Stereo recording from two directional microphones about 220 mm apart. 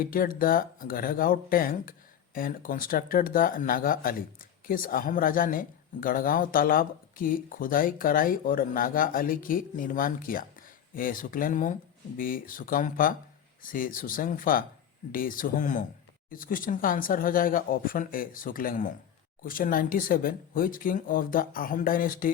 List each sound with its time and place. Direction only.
0.0 s speech: 40° left (ahead or behind)